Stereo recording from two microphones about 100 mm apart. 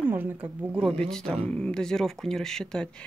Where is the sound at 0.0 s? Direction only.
20° right (ahead or behind).